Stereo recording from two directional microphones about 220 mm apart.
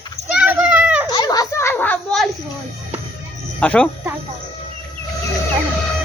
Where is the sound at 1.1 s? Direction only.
20° left (ahead or behind).